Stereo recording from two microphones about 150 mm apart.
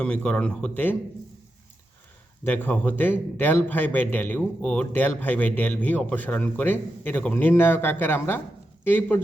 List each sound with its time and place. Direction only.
0.0 s a man's voice: 5° left (ahead or behind)
2.4 s a man's voice: 10° left (ahead or behind)